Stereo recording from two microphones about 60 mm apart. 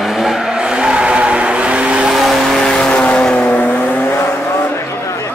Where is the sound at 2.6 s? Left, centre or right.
Centre.